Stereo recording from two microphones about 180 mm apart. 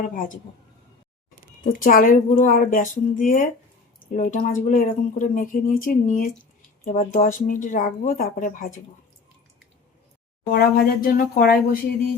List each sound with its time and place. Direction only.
0.1 s speech: 50° left (ahead or behind)
1.6 s speech: 50° left (ahead or behind)
10.5 s speech: 55° left (ahead or behind)